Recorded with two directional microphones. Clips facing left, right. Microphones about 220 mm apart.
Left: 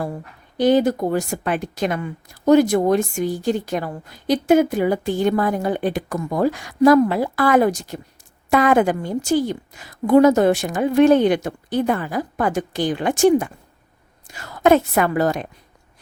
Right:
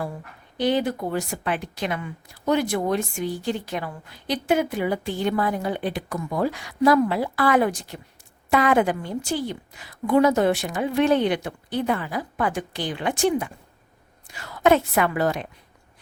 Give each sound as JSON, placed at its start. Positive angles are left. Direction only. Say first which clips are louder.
{"t": 0.5, "sound": "a woman's voice", "louder": "left 6 dB", "side_deg": 45}